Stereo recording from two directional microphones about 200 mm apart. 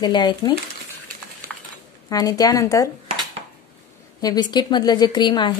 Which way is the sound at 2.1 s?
15° left (ahead or behind).